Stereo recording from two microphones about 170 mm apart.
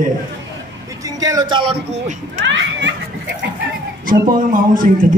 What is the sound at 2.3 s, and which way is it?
Children playing, 90° right.